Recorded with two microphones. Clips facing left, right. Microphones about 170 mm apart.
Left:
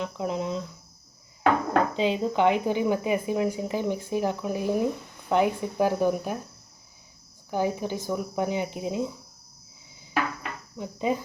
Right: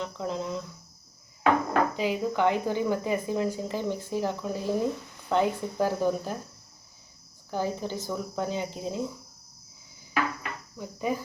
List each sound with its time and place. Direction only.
0.0 s speech: 15° left (ahead or behind)
1.9 s speech: 25° left (ahead or behind)
7.5 s speech: 15° left (ahead or behind)
10.8 s speech: 20° left (ahead or behind)